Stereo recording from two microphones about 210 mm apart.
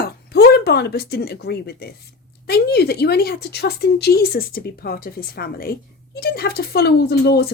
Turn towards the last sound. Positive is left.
turn(degrees=50)  # may be behind; listen again after turning